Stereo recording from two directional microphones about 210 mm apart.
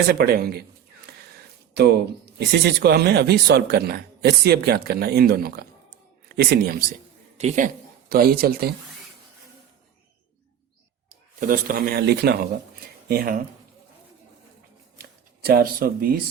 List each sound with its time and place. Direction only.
0.1 s speech: 50° right (ahead or behind)
1.1 s a sound: 50° right (ahead or behind)
1.7 s speech: 50° right (ahead or behind)
7.3 s a woman's voice: 35° right (ahead or behind)
8.1 s speech: 45° right (ahead or behind)
11.3 s speech: 40° right (ahead or behind)
14.9 s shuffling cards: 45° right (ahead or behind)